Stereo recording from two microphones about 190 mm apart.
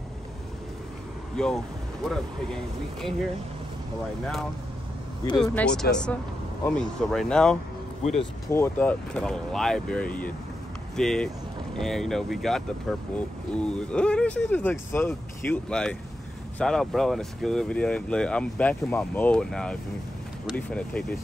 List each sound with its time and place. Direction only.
1.3 s speech: 5° left (ahead or behind)
5.4 s speech: 5° left (ahead or behind)